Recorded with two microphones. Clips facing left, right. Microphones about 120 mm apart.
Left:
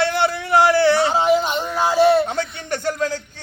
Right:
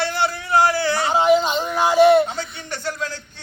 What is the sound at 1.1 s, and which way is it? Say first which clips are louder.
Speech: right 1 dB; 20° right (ahead or behind).